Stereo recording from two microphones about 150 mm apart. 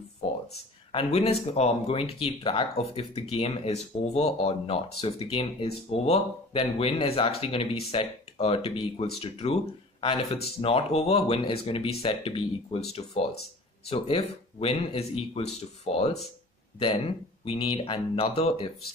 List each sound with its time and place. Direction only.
0.9 s speech: 40° left (ahead or behind)